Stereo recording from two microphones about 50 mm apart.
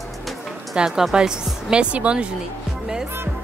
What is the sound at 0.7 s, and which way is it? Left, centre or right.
Speech, centre.